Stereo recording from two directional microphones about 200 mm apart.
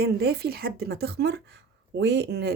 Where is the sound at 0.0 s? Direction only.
55° right (ahead or behind).